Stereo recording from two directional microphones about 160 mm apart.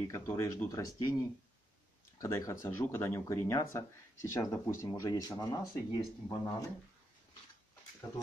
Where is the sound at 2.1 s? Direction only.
20° left (ahead or behind).